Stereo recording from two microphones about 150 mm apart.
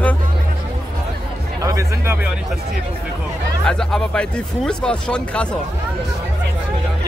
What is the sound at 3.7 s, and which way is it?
Speech, 5° left (ahead or behind).